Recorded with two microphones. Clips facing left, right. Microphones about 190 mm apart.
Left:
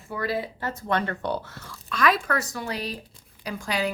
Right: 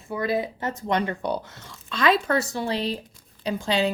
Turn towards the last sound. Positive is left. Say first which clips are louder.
# right 4 dB
turn(degrees=-25)  # may be behind; listen again after turning